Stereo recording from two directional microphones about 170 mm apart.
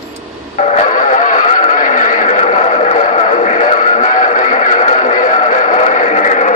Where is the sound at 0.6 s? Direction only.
45° left (ahead or behind).